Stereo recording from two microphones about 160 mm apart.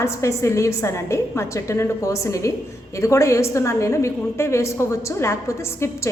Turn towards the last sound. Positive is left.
turn(degrees=15)  # may be behind; listen again after turning